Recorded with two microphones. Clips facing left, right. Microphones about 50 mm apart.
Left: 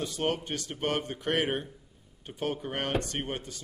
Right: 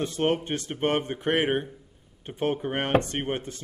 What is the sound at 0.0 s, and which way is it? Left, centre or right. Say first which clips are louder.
Speech: right 5 dB; right.